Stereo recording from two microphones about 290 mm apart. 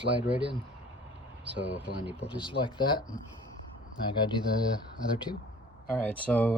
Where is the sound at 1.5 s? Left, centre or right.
Right.